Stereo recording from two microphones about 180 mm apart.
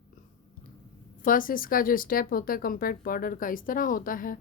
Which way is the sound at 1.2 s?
50° left (ahead or behind).